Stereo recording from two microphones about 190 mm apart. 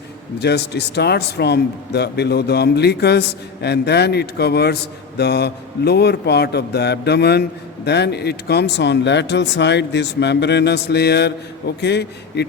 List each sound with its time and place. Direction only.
0.3 s a man's voice: 60° left (ahead or behind)